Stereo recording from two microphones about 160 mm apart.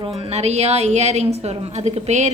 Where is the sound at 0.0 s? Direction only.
40° right (ahead or behind).